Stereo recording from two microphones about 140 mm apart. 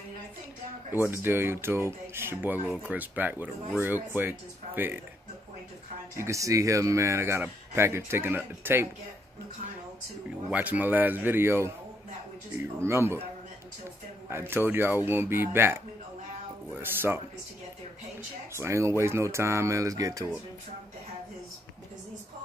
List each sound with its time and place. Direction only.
0.9 s speech: 15° right (ahead or behind)
6.1 s speech: 20° right (ahead or behind)
10.5 s speech: 10° right (ahead or behind)
14.7 s speech: 15° right (ahead or behind)
18.5 s speech: 20° right (ahead or behind)